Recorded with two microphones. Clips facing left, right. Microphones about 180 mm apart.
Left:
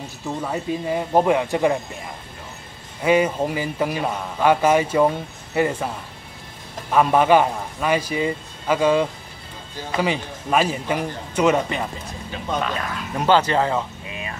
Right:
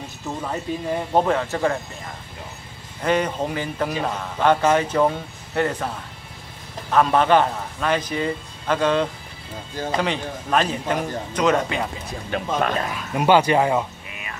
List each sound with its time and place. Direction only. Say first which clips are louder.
0.4 s speech: left 2 dB; 5° left (ahead or behind)
3.0 s speech: left 3 dB; 10° left (ahead or behind)
6.9 s speech: left 1 dB; 10° left (ahead or behind)
12.5 s speech: right 2 dB; 50° right (ahead or behind)
12.9 s speech: even; 10° right (ahead or behind)